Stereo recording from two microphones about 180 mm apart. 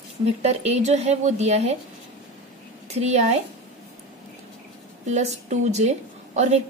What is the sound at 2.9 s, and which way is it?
Speech, 40° right (ahead or behind).